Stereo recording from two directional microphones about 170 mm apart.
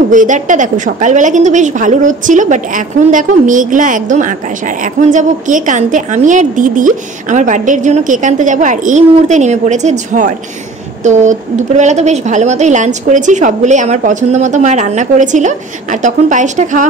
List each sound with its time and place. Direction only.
0.1 s a woman's voice: 50° right (ahead or behind)